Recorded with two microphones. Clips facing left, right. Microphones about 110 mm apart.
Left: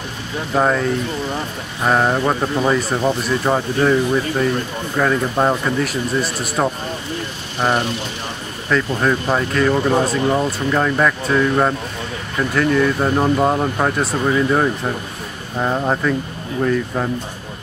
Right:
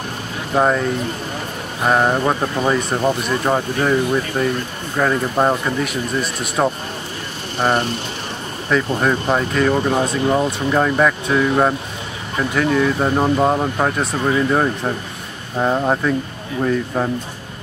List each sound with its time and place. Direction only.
0.5 s speech: 5° right (ahead or behind)